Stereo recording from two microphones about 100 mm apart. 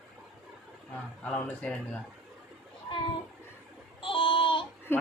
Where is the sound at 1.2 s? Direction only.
15° left (ahead or behind).